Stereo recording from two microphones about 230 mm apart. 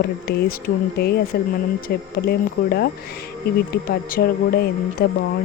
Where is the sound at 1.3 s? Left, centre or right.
Left.